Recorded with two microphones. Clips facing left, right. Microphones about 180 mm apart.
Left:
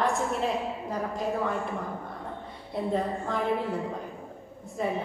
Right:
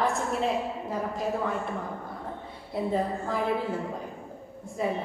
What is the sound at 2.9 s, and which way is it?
Speech, centre (ahead or behind).